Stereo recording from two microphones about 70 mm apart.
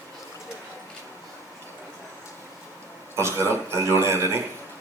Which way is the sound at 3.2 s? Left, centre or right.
Right.